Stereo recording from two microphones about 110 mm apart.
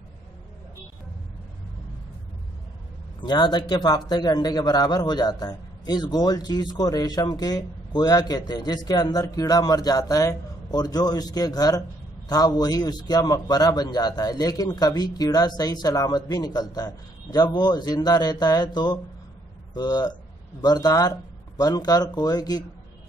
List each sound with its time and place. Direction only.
3.2 s a man's voice: 40° left (ahead or behind)